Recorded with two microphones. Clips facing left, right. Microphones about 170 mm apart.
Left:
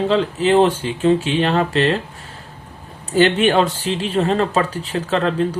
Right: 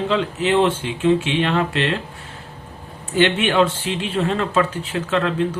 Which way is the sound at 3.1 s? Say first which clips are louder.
Left 2 dB; 40° left (ahead or behind).